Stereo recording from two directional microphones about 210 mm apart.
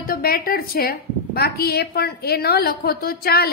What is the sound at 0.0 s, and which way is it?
A woman's voice, 45° left (ahead or behind).